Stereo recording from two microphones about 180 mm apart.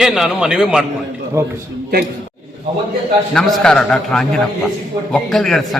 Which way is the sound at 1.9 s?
55° right (ahead or behind).